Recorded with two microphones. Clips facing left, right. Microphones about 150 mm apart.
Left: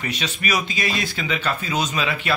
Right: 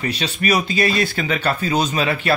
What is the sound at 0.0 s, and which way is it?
Speech, 35° right (ahead or behind).